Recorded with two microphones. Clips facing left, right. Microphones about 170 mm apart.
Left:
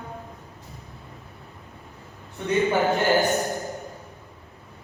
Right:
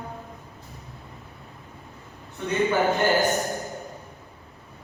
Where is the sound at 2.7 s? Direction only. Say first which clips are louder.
Right 1 dB; centre (ahead or behind).